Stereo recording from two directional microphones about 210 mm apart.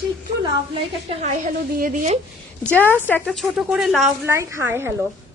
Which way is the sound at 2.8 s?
10° left (ahead or behind).